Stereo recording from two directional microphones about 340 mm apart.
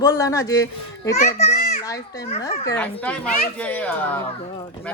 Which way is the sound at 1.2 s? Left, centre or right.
Left.